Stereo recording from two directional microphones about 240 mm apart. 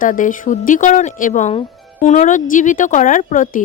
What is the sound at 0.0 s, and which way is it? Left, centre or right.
Speech, left.